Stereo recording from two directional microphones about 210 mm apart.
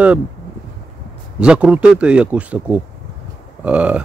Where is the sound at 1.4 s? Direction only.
5° right (ahead or behind).